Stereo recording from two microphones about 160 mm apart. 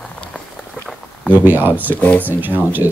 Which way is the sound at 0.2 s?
5° left (ahead or behind).